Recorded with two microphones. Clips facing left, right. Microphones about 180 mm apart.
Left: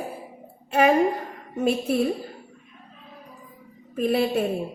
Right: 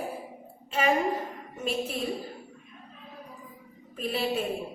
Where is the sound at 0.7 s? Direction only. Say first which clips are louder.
Left 7 dB; 60° left (ahead or behind).